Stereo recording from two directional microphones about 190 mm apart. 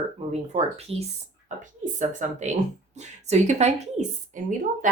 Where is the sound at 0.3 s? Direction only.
35° right (ahead or behind).